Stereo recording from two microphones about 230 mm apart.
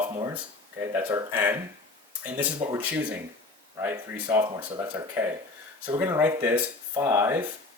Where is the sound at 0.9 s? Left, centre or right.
Centre.